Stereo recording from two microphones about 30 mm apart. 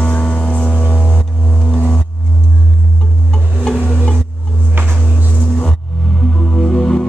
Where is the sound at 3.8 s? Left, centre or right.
Right.